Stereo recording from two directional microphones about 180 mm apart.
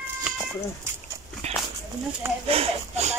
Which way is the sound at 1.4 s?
35° right (ahead or behind).